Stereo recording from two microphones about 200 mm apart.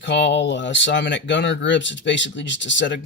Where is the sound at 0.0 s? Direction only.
60° left (ahead or behind).